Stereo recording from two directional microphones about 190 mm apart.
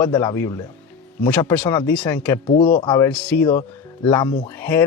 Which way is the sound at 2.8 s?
25° left (ahead or behind).